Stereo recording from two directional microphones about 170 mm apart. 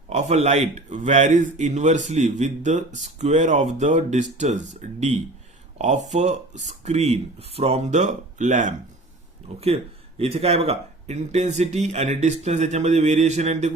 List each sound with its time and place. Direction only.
0.1 s speech: 40° right (ahead or behind)